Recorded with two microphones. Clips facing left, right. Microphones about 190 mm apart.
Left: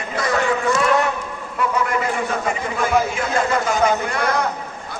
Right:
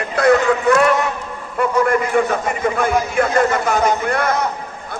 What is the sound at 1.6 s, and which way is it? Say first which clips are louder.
A man's voice: right 5 dB; 50° right (ahead or behind).